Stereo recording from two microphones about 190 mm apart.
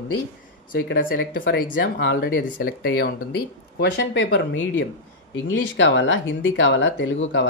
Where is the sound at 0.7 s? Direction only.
55° left (ahead or behind).